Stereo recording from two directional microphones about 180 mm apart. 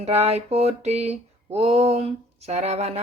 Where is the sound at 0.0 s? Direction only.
35° right (ahead or behind).